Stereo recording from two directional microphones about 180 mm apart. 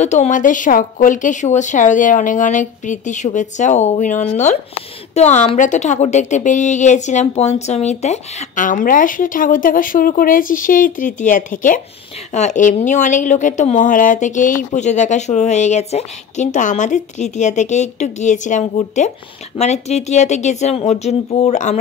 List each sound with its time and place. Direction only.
0.0 s a woman's voice: 40° left (ahead or behind)